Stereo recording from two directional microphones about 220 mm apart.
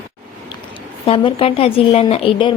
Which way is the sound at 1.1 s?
25° left (ahead or behind).